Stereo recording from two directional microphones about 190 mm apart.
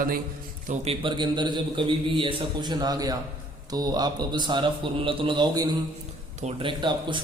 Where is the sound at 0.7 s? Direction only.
30° right (ahead or behind).